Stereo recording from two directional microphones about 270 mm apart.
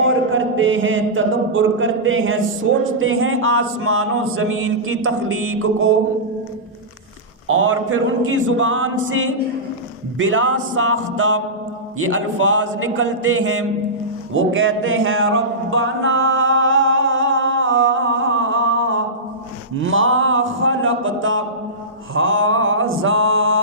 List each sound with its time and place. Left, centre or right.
0.1 s speech: right
2.8 s chant: right
7.4 s chant: right
14.3 s a sound: right
22.1 s mantra: right